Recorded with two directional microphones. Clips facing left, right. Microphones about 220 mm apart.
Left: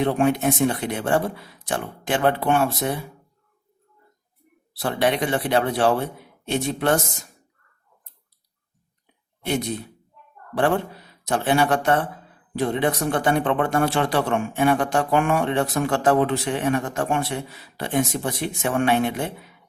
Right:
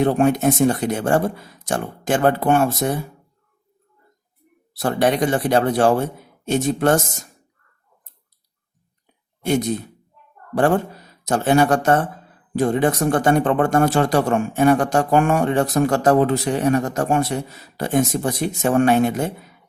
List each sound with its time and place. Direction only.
0.0 s speech: 45° right (ahead or behind)
4.8 s speech: 45° right (ahead or behind)
9.4 s speech: 45° right (ahead or behind)